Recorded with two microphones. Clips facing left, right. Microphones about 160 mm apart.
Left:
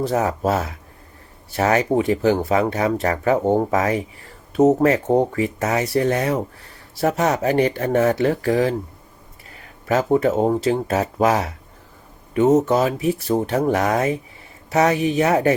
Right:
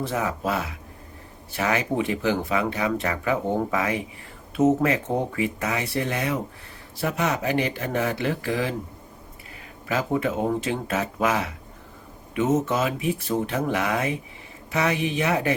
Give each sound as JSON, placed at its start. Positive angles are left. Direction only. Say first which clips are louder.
{"t": 0.0, "sound": "speech", "louder": "left 6 dB", "side_deg": 40}
{"t": 9.8, "sound": "speech", "louder": "left 7 dB", "side_deg": 40}